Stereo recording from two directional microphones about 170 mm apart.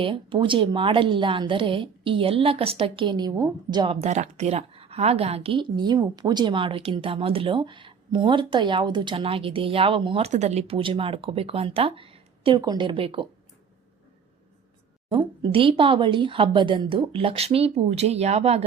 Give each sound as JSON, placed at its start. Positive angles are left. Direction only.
{"t": 0.0, "sound": "a woman's voice", "side_deg": -30}
{"t": 4.0, "sound": "a woman's voice", "side_deg": -40}
{"t": 15.1, "sound": "a woman's voice", "side_deg": -30}